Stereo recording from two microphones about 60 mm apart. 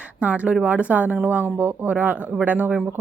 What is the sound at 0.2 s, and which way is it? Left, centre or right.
A woman's voice, right.